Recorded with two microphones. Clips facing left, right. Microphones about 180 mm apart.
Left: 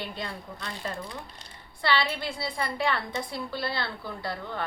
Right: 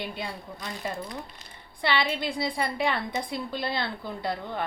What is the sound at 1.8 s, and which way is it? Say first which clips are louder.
A woman's voice: right 1 dB; 15° right (ahead or behind).